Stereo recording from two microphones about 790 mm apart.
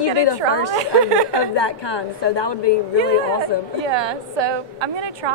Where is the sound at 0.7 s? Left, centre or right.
Right.